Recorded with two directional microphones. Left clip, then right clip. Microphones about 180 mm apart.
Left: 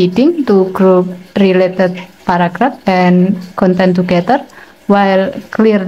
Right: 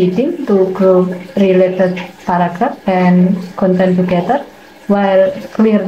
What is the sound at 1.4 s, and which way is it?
Speech, 40° left (ahead or behind).